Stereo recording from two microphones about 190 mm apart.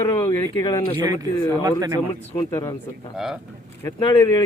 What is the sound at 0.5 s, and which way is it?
Speech, 25° left (ahead or behind).